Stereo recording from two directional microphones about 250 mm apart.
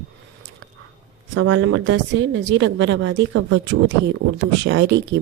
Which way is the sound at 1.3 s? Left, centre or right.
Right.